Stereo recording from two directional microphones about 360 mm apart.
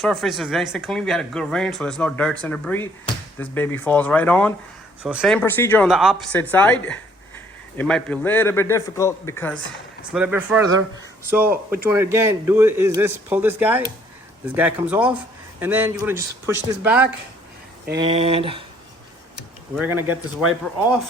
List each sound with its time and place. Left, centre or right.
0.0 s speech: centre
17.9 s speech: centre
19.7 s speech: centre